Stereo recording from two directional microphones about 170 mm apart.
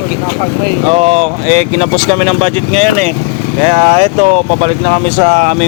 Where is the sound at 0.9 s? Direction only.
35° right (ahead or behind).